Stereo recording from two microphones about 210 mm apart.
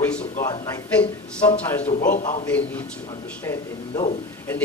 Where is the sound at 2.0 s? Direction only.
40° left (ahead or behind).